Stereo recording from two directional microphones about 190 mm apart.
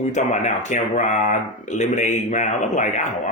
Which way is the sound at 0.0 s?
40° left (ahead or behind).